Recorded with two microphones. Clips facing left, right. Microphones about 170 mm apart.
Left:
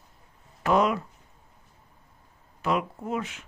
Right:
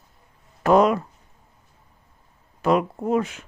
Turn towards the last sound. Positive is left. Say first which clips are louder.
# right 9 dB
turn(degrees=-40)  # may be behind; listen again after turning